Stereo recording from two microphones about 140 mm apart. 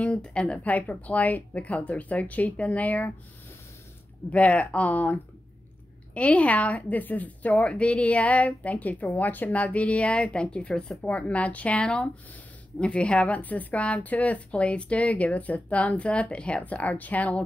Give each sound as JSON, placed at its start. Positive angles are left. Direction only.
{"t": 0.0, "sound": "a woman's voice", "side_deg": 5}
{"t": 4.3, "sound": "a woman's voice", "side_deg": 10}